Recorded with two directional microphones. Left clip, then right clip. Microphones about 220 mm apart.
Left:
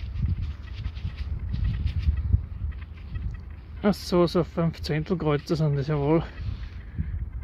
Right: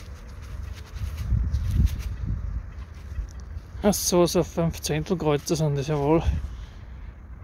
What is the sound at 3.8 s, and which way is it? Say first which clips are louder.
Speech: right 2 dB; centre (ahead or behind).